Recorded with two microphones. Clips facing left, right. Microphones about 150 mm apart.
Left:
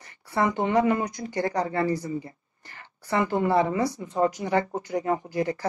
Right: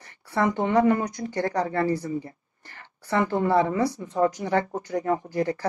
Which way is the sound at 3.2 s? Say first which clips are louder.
Right 1 dB; 15° left (ahead or behind).